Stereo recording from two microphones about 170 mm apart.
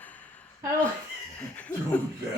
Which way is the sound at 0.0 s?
10° left (ahead or behind).